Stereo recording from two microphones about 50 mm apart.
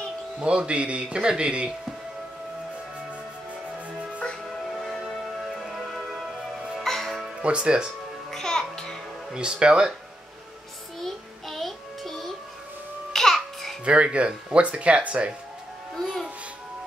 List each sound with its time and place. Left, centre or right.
0.4 s speech: right
5.4 s music: centre
7.4 s speech: centre
8.3 s music: centre
9.3 s speech: centre
11.0 s music: centre
13.1 s babbling: centre
13.8 s speech: right